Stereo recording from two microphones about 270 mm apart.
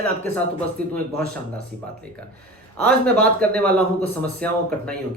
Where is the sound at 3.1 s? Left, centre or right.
Centre.